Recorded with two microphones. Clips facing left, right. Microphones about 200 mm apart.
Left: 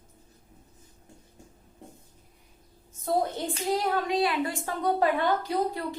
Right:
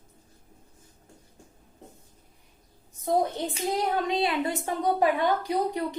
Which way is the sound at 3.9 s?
20° right (ahead or behind).